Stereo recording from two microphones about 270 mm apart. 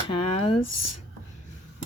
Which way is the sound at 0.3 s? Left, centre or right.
Left.